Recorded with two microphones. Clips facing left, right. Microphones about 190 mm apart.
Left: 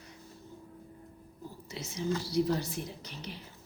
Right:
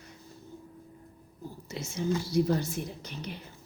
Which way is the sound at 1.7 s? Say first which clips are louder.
Right 4 dB; 50° right (ahead or behind).